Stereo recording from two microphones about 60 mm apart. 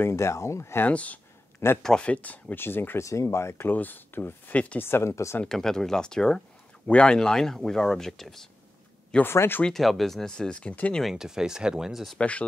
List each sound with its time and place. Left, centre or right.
0.0 s speech: left
0.8 s speech: left
1.8 s speech: centre
2.0 s speech: left
2.6 s speech: left
3.0 s speech: left
3.7 s speech: left
4.7 s speech: left
5.5 s speech: centre
9.2 s speech: left
9.7 s speech: centre
10.3 s speech: centre
11.1 s speech: centre
12.2 s speech: left